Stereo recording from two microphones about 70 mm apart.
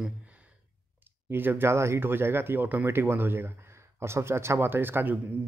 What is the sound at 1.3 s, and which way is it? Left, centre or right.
Speech, right.